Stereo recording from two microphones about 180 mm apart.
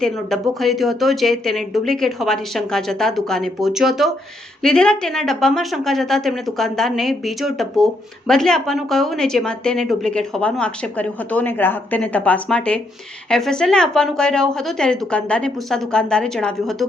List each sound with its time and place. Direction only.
0.0 s speech: centre (ahead or behind)